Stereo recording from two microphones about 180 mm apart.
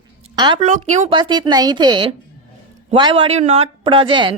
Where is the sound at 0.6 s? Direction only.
40° right (ahead or behind).